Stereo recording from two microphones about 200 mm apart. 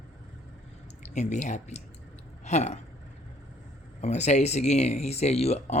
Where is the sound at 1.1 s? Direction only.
35° left (ahead or behind).